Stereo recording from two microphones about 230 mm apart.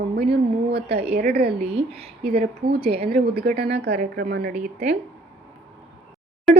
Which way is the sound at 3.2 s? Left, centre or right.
Right.